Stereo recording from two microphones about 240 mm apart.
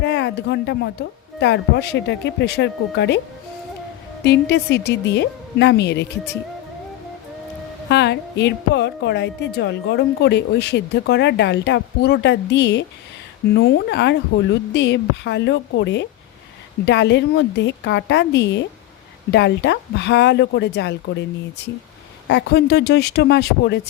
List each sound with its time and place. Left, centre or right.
0.0 s speech: left
4.2 s speech: left
7.9 s speech: left
22.3 s speech: left